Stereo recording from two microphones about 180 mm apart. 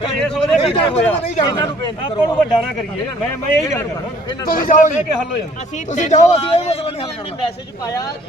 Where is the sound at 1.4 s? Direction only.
25° left (ahead or behind).